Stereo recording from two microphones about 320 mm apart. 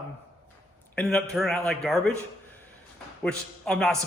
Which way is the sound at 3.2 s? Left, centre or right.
Centre.